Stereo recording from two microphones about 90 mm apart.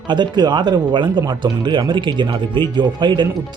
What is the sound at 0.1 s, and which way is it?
Speech, 55° right (ahead or behind).